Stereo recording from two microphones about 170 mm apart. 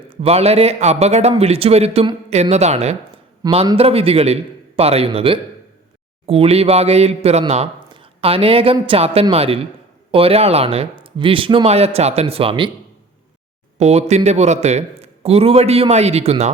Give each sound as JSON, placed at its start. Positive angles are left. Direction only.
{"t": 0.1, "sound": "speech", "side_deg": -35}
{"t": 3.4, "sound": "a man's voice", "side_deg": -20}
{"t": 3.8, "sound": "speech", "side_deg": -35}
{"t": 13.7, "sound": "speech", "side_deg": -40}